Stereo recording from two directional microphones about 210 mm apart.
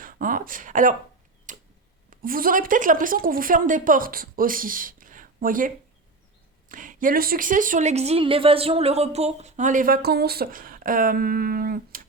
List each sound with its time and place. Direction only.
0.0 s speech: 40° right (ahead or behind)
1.5 s tick-tock: 40° right (ahead or behind)
2.0 s speech: 40° right (ahead or behind)